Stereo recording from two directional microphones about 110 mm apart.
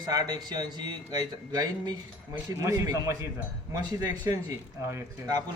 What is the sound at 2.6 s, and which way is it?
Speech, 30° right (ahead or behind).